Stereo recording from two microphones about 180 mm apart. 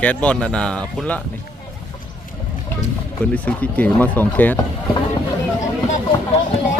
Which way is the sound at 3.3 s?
10° left (ahead or behind).